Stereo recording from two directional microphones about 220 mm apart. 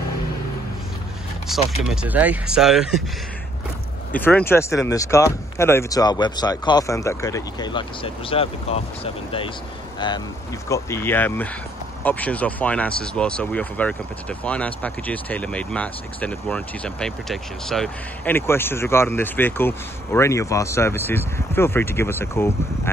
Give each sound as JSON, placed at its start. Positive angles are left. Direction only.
{"t": 1.5, "sound": "speech", "side_deg": 0}
{"t": 4.1, "sound": "speech", "side_deg": 5}